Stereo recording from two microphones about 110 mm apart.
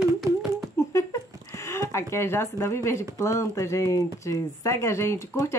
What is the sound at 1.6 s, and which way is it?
Speech, 25° left (ahead or behind).